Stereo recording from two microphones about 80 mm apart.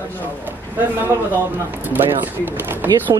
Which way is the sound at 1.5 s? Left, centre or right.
Right.